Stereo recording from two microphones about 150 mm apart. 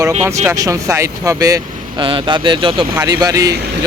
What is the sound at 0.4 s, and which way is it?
Speech, 20° right (ahead or behind).